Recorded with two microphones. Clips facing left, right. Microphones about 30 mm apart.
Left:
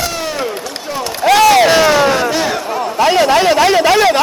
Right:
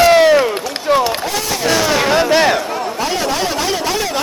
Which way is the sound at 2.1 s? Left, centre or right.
Right.